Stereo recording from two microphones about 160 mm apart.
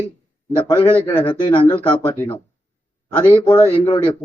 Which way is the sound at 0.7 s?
35° left (ahead or behind).